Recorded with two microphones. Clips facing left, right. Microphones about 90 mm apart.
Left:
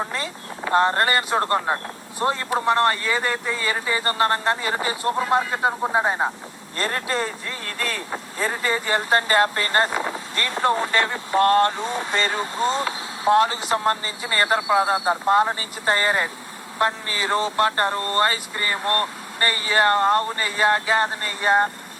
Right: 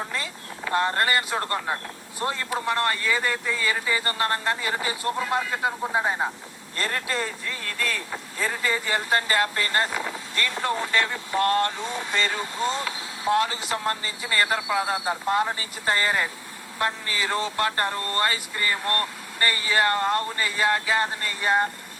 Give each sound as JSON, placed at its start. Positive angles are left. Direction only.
{"t": 0.0, "sound": "speech", "side_deg": 35}